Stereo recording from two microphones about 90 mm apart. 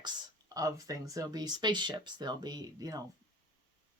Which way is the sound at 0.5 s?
40° right (ahead or behind).